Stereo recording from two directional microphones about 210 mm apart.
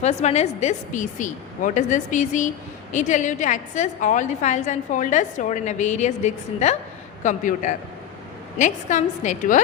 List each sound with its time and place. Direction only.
0.0 s a woman's voice: 30° left (ahead or behind)